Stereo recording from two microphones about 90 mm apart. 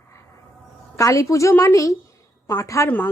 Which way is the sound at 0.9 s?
35° left (ahead or behind).